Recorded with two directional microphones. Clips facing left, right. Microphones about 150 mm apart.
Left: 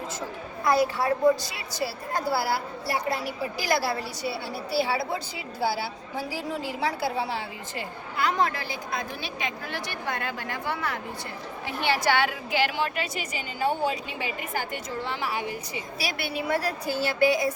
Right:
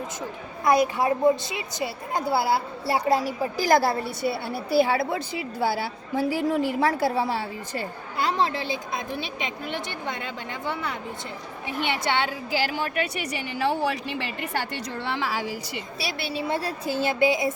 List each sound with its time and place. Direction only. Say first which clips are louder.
0.6 s a woman's voice: right 2 dB; 20° right (ahead or behind); by 7.1 s 50° right (ahead or behind)
7.8 s a woman's voice: even; 30° right (ahead or behind)
12.5 s speech: left 1 dB; 35° right (ahead or behind)
13.1 s a woman's voice: right 3 dB; 80° right
16.1 s a woman's voice: even; 30° right (ahead or behind)